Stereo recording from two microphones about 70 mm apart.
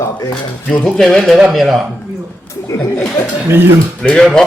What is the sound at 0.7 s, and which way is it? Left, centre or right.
Speech, centre.